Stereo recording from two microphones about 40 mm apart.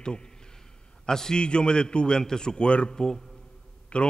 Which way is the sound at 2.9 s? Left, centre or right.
Centre.